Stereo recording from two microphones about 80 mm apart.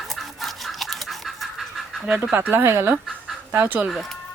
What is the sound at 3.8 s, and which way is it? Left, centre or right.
Speech, centre.